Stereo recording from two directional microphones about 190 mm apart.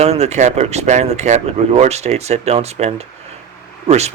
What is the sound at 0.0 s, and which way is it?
Speech, 35° right (ahead or behind).